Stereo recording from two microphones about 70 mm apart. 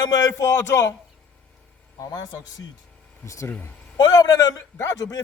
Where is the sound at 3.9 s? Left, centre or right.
Left.